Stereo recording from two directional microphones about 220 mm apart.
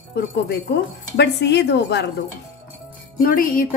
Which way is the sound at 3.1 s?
40° left (ahead or behind).